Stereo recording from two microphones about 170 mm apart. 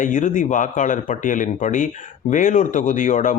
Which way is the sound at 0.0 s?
50° left (ahead or behind).